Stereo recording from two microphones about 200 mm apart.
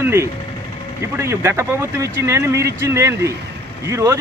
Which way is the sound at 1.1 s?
15° right (ahead or behind).